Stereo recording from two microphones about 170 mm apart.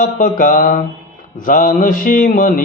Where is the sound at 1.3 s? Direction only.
55° left (ahead or behind).